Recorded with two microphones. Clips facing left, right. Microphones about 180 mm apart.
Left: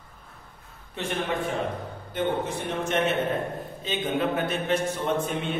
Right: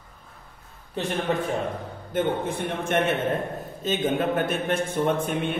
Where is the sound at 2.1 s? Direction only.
55° right (ahead or behind).